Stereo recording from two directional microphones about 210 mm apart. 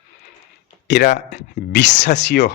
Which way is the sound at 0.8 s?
55° left (ahead or behind).